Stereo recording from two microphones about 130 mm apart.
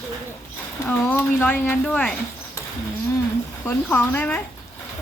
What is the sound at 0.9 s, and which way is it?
Speech, 15° left (ahead or behind).